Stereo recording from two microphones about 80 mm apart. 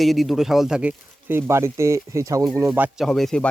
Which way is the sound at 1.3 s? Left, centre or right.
Right.